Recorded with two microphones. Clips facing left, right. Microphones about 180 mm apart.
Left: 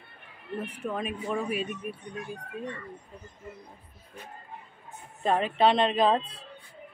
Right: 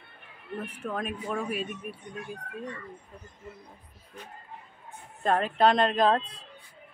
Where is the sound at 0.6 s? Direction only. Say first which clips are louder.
Left 1 dB; 5° left (ahead or behind).